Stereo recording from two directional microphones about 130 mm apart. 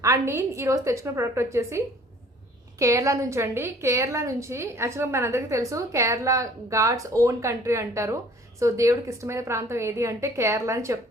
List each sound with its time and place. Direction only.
0.0 s a woman's voice: 20° right (ahead or behind)